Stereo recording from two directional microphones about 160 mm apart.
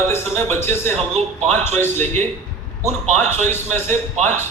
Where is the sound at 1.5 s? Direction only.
15° left (ahead or behind).